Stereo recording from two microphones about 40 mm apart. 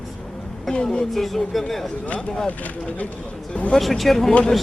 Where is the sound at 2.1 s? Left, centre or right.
Left.